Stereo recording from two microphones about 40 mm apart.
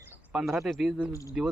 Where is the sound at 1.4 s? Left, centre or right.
Centre.